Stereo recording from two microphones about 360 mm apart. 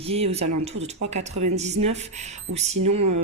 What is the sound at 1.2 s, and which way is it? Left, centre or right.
Speech, right.